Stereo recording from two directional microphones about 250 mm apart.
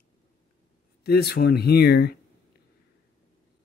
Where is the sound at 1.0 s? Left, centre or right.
Left.